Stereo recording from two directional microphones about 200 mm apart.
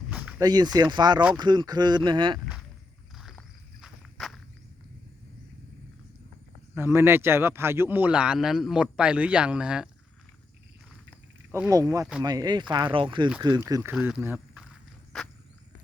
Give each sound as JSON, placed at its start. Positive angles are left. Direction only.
{"t": 0.1, "sound": "a sound", "side_deg": -10}
{"t": 0.4, "sound": "speech", "side_deg": -20}
{"t": 3.2, "sound": "walk", "side_deg": 0}
{"t": 6.7, "sound": "speech", "side_deg": -10}
{"t": 11.5, "sound": "speech", "side_deg": -15}